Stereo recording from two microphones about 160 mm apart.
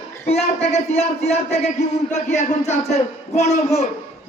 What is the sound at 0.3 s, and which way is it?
A man's voice, 40° left (ahead or behind).